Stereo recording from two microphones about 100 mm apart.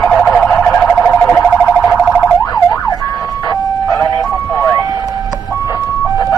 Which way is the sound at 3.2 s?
40° left (ahead or behind).